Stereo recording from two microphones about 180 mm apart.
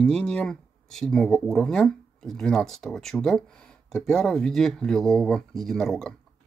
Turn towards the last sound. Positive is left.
turn(degrees=0)  # may be behind; listen again after turning